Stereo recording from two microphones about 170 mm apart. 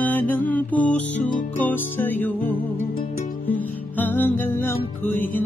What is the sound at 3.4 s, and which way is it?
Music, 10° left (ahead or behind).